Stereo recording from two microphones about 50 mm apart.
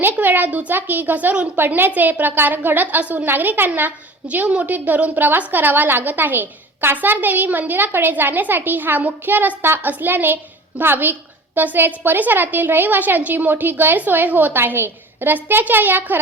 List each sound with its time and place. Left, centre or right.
0.0 s a woman's voice: right
1.5 s a woman's voice: right
4.4 s a woman's voice: right
4.7 s a woman's voice: right